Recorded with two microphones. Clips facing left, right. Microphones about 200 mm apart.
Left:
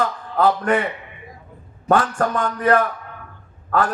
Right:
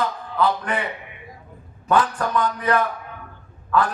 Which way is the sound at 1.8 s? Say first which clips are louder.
Left 2 dB; 45° left (ahead or behind).